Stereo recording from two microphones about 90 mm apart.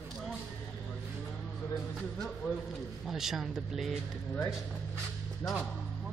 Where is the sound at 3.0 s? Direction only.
5° right (ahead or behind).